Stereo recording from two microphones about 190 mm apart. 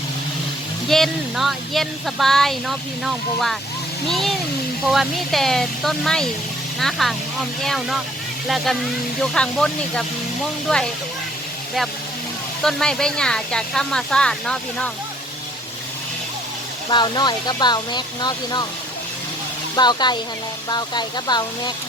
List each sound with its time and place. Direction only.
0.9 s speech: centre (ahead or behind)
12.6 s speech: 5° left (ahead or behind)
16.9 s speech: 25° left (ahead or behind)
19.7 s speech: 20° left (ahead or behind)